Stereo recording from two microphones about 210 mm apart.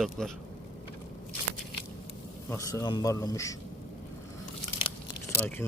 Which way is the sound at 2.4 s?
15° left (ahead or behind).